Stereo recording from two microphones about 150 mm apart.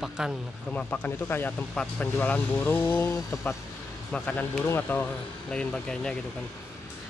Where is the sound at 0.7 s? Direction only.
10° left (ahead or behind).